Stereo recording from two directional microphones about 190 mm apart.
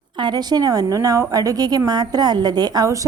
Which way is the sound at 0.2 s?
20° right (ahead or behind).